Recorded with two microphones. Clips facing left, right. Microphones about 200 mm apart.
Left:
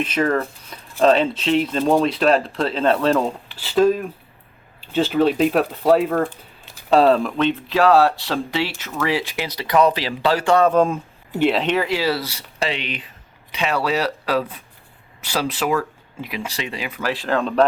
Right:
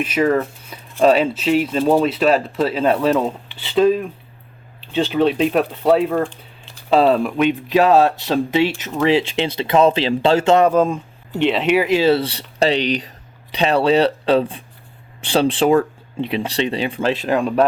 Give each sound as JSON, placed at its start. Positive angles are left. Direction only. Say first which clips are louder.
{"t": 0.0, "sound": "speech", "louder": "right 3 dB", "side_deg": -5}
{"t": 10.7, "sound": "speech", "louder": "right 1 dB", "side_deg": 0}
{"t": 11.6, "sound": "speech", "louder": "right 5 dB", "side_deg": -10}